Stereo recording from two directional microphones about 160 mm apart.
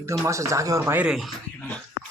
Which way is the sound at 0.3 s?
20° right (ahead or behind).